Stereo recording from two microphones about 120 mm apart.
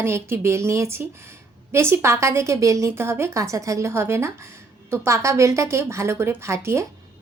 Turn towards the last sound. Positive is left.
turn(degrees=-20)  # may be behind; listen again after turning